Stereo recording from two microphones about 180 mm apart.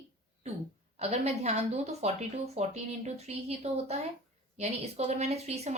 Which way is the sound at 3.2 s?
35° right (ahead or behind).